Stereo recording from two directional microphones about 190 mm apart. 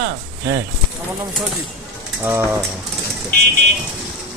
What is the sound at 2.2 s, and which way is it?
Speech, 10° right (ahead or behind).